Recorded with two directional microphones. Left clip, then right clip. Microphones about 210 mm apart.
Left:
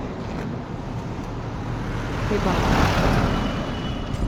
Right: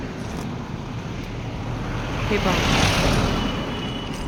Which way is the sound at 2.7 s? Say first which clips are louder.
Right 1 dB; 40° left (ahead or behind).